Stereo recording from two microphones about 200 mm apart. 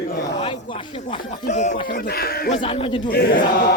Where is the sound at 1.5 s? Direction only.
35° left (ahead or behind).